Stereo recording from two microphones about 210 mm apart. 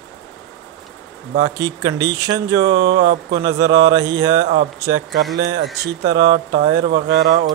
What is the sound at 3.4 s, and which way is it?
Mantra, 15° right (ahead or behind).